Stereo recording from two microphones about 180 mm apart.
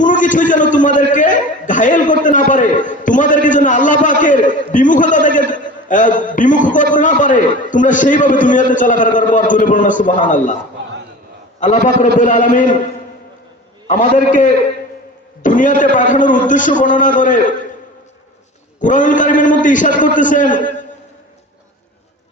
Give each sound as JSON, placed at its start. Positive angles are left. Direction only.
{"t": 0.0, "sound": "a sound", "side_deg": 45}
{"t": 11.6, "sound": "a man's voice", "side_deg": 45}
{"t": 13.8, "sound": "a man's voice", "side_deg": 45}
{"t": 18.8, "sound": "a man's voice", "side_deg": 45}